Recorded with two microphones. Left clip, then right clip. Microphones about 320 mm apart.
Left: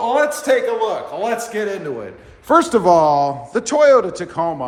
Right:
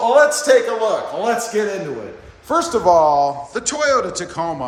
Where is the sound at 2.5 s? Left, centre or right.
Left.